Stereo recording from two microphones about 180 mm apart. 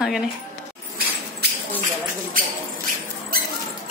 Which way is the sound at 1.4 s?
65° right (ahead or behind).